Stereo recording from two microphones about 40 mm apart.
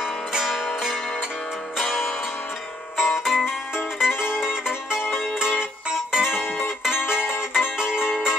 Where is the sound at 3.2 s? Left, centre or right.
Centre.